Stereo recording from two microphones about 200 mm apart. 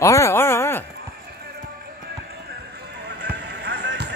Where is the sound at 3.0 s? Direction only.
55° right (ahead or behind).